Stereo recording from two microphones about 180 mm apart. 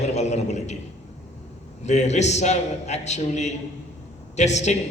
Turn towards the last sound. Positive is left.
turn(degrees=40)  # may be behind; listen again after turning